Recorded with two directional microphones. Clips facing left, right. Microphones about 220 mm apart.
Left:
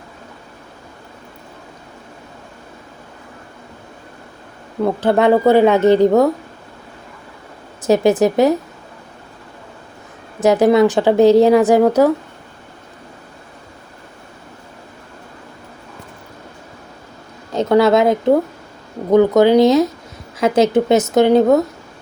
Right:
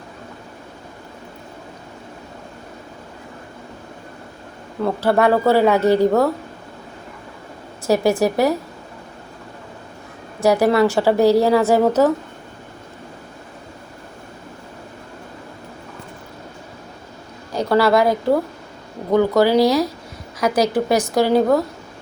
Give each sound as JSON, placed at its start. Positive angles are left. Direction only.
{"t": 4.9, "sound": "speech", "side_deg": 20}
{"t": 7.9, "sound": "speech", "side_deg": 20}
{"t": 10.4, "sound": "speech", "side_deg": 20}
{"t": 17.5, "sound": "speech", "side_deg": 20}